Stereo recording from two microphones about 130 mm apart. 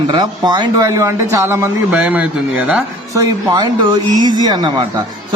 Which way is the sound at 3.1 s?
30° right (ahead or behind).